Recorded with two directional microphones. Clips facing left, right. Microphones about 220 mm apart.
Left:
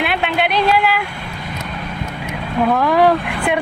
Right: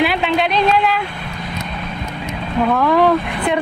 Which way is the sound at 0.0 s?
Centre (ahead or behind).